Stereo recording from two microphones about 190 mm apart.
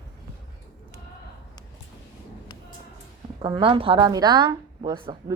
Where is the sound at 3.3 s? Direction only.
25° right (ahead or behind).